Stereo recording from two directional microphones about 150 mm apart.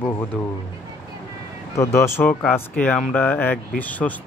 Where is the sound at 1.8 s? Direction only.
20° left (ahead or behind).